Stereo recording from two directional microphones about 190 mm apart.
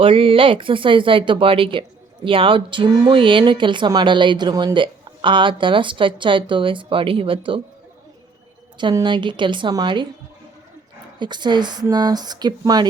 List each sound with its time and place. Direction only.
0.0 s speech: 30° right (ahead or behind)
8.8 s speech: 25° right (ahead or behind)
11.2 s speech: 25° right (ahead or behind)